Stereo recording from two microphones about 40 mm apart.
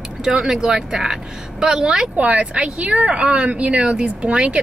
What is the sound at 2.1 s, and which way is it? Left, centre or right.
A woman's voice, right.